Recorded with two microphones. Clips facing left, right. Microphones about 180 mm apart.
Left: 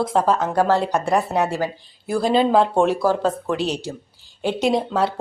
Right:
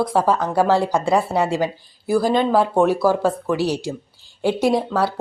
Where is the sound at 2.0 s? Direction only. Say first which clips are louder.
Right 1 dB; 5° right (ahead or behind).